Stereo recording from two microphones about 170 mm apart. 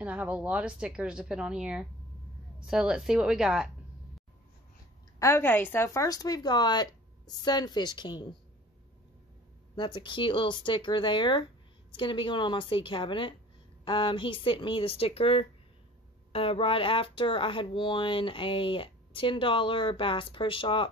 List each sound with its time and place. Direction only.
0.0 s speech: 10° right (ahead or behind)
5.2 s speech: 15° left (ahead or behind)
9.8 s speech: 30° left (ahead or behind)